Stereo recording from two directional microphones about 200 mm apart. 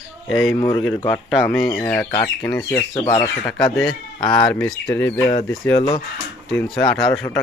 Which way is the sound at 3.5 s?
Centre (ahead or behind).